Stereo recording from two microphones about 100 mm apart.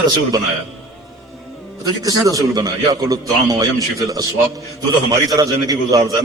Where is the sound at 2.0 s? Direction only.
35° right (ahead or behind).